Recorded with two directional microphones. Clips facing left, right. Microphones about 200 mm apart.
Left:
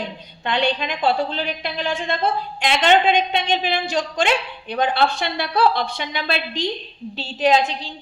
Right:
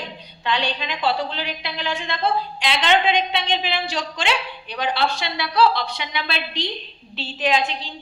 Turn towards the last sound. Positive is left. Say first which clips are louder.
# left 4 dB
turn(degrees=40)  # may be behind; listen again after turning